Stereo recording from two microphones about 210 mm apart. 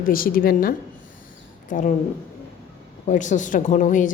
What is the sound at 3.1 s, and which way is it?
A woman's voice, 35° left (ahead or behind).